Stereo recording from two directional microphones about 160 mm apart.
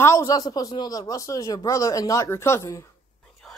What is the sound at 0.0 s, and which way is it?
A woman's voice, 20° left (ahead or behind).